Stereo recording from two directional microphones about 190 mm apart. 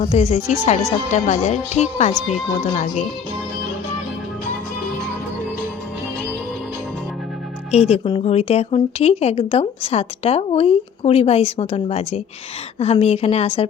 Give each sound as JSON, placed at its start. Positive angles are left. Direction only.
{"t": 0.0, "sound": "speech", "side_deg": 35}
{"t": 7.7, "sound": "speech", "side_deg": 35}